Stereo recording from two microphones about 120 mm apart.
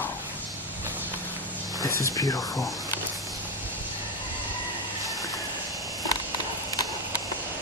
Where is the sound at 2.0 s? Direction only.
30° left (ahead or behind).